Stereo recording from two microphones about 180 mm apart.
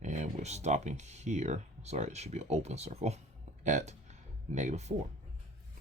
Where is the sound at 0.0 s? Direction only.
45° right (ahead or behind).